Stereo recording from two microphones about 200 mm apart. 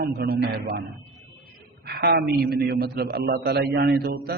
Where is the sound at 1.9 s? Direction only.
50° right (ahead or behind).